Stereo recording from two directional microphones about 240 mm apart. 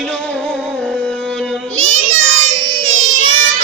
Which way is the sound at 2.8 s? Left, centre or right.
Right.